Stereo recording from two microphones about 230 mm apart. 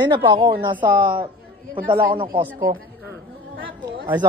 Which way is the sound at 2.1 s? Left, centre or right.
Right.